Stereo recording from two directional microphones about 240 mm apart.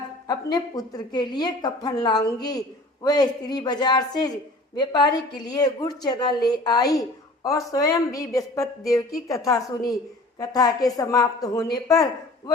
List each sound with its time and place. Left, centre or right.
0.5 s a woman's voice: centre